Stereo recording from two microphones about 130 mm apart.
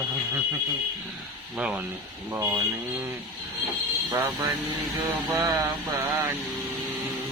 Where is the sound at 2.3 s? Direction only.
20° right (ahead or behind).